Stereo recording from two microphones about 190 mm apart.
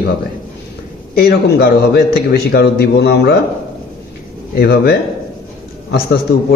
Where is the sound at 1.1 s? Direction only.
55° left (ahead or behind).